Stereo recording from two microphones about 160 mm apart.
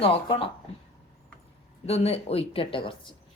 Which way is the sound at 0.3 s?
35° left (ahead or behind).